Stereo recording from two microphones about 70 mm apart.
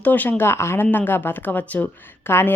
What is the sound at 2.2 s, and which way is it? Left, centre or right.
Speech, left.